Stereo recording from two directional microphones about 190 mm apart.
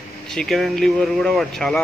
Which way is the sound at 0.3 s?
Centre (ahead or behind).